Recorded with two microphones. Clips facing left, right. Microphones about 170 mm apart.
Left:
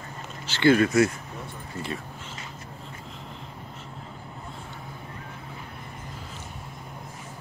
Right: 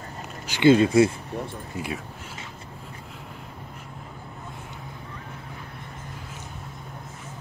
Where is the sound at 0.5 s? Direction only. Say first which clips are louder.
Right 3 dB; 20° right (ahead or behind).